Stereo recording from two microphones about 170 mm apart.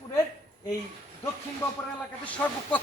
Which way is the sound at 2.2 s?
10° left (ahead or behind).